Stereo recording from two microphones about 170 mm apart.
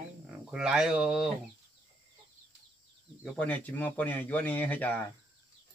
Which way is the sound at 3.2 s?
10° left (ahead or behind).